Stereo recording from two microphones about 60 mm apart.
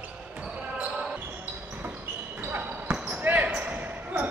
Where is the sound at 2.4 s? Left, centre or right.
Right.